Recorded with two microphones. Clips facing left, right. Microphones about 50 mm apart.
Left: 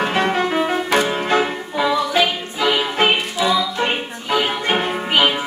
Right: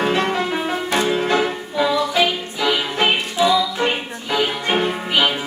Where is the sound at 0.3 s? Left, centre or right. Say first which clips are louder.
Left 3 dB; left.